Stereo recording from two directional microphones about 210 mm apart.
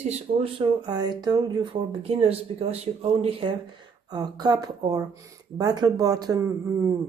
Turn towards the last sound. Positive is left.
turn(degrees=-15)  # may be behind; listen again after turning